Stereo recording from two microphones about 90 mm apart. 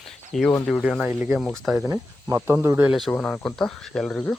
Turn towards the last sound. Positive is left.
turn(degrees=5)  # may be behind; listen again after turning